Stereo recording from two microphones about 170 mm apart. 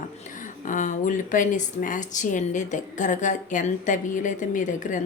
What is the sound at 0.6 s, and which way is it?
Speech, 50° left (ahead or behind).